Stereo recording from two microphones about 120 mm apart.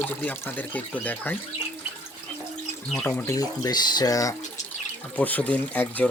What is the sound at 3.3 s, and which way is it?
Speech, 30° left (ahead or behind).